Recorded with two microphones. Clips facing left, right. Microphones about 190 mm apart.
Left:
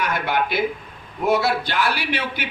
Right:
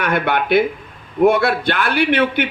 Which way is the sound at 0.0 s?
60° right (ahead or behind).